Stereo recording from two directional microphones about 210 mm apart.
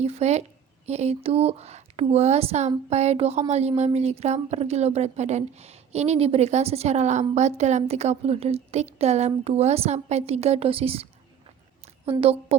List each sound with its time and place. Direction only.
0.0 s a woman's voice: 30° right (ahead or behind)